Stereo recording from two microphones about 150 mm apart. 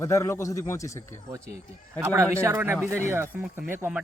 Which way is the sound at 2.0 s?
20° right (ahead or behind).